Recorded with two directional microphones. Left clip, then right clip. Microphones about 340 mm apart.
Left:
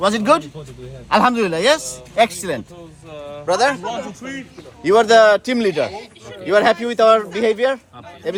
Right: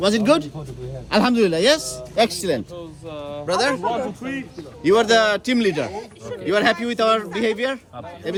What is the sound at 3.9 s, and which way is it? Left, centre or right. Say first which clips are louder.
Speech: right 2 dB; right.